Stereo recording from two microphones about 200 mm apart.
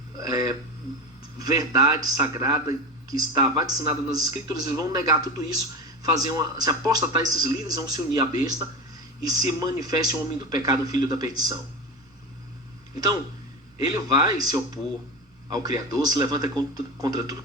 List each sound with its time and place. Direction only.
0.2 s a sound: 20° right (ahead or behind)
1.4 s speech: 20° right (ahead or behind)
13.7 s speech: 20° right (ahead or behind)